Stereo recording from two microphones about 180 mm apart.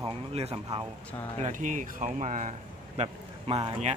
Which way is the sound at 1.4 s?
45° right (ahead or behind).